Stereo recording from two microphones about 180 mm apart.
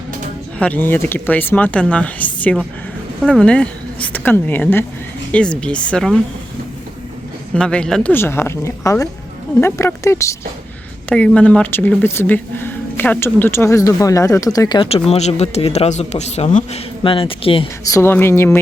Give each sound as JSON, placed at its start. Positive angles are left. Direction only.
{"t": 0.6, "sound": "speech", "side_deg": 10}
{"t": 7.5, "sound": "a man's voice", "side_deg": 5}
{"t": 17.0, "sound": "speech", "side_deg": 30}
{"t": 17.8, "sound": "speech", "side_deg": 15}